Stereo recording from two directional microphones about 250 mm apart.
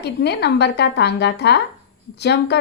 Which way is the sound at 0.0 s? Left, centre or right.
Left.